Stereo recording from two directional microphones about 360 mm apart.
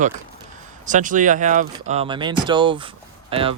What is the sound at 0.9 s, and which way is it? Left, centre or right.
Speech, right.